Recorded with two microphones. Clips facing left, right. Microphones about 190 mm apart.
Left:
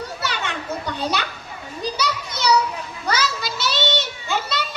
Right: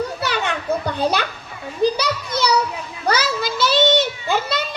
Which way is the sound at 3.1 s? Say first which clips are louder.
Right 4 dB; 55° right (ahead or behind).